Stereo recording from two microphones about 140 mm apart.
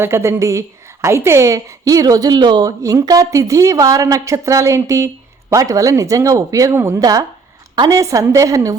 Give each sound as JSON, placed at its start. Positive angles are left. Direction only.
{"t": 0.0, "sound": "a woman's voice", "side_deg": -20}